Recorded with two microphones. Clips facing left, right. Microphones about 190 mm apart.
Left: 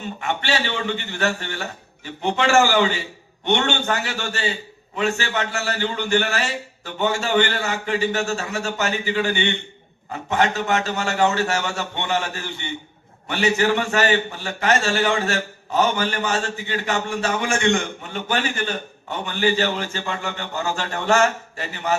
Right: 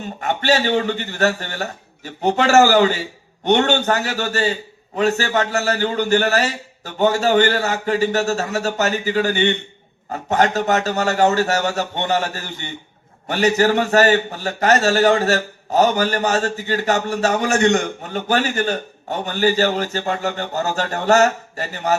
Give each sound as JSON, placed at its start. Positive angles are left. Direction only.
{"t": 0.0, "sound": "a man's voice", "side_deg": -40}